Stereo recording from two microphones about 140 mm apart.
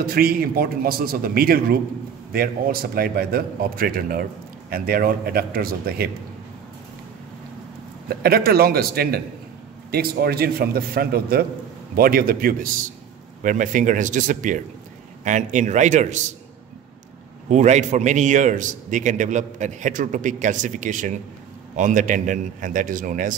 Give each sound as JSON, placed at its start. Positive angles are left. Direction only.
{"t": 0.0, "sound": "a man's voice", "side_deg": -90}
{"t": 8.2, "sound": "a man's voice", "side_deg": -90}
{"t": 13.4, "sound": "a man's voice", "side_deg": -70}
{"t": 17.5, "sound": "a man's voice", "side_deg": -55}